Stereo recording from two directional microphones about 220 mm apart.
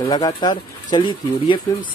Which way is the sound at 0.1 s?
20° left (ahead or behind).